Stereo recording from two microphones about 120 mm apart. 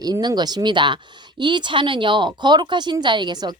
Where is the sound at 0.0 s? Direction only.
35° right (ahead or behind).